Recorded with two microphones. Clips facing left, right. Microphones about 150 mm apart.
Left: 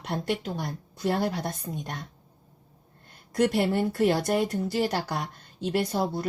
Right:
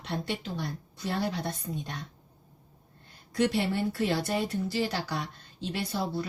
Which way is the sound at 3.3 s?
50° left (ahead or behind).